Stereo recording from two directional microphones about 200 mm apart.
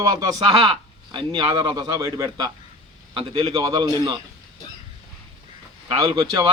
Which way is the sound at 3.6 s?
20° right (ahead or behind).